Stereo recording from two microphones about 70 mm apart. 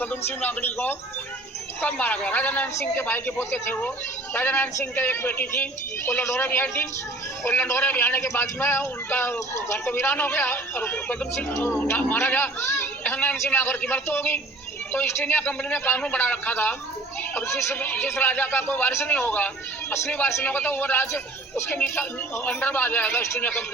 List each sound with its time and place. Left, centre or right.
0.0 s a man's voice: left
11.3 s a man's voice: left
17.7 s a man's voice: left